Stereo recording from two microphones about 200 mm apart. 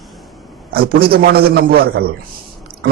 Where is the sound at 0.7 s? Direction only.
50° right (ahead or behind).